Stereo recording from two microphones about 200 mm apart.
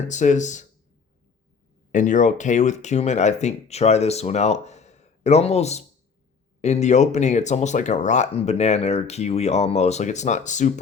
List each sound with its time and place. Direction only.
0.1 s speech: 35° left (ahead or behind)
1.9 s speech: 40° left (ahead or behind)